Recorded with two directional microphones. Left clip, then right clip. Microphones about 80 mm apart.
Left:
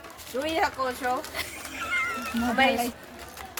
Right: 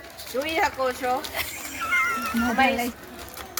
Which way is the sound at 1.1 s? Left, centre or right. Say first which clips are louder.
Right 3 dB; centre.